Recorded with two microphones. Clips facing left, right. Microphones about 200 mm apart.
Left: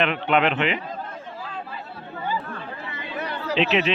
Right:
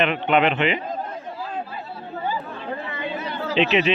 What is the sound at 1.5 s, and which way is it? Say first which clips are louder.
Chatter: right 5 dB; 45° right (ahead or behind).